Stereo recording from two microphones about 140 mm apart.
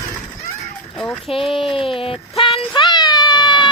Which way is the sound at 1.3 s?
40° left (ahead or behind).